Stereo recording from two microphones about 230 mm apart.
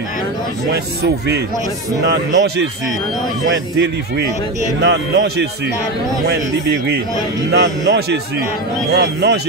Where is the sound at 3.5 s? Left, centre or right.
Right.